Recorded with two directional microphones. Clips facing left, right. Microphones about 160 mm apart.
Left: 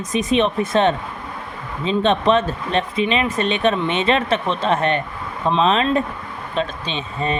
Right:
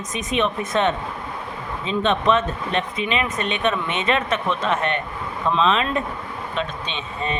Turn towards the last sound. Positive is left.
turn(degrees=35)  # may be behind; listen again after turning